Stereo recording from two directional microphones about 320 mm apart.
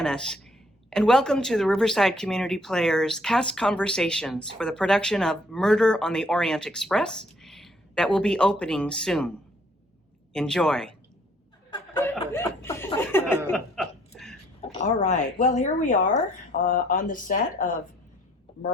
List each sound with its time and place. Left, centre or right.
0.0 s speech: centre
10.3 s speech: centre
11.7 s chuckle: centre
14.6 s speech: left